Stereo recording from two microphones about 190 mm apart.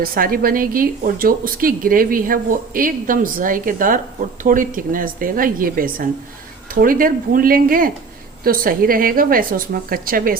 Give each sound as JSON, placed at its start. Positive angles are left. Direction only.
{"t": 0.0, "sound": "speech", "side_deg": -50}